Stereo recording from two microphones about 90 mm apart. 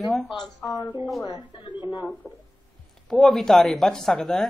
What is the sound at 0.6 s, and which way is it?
Speech, 45° left (ahead or behind).